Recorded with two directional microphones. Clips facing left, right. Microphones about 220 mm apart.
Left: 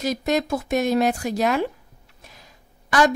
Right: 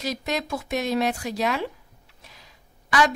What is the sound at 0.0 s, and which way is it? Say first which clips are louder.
A woman's voice: left 6 dB; 50° left (ahead or behind).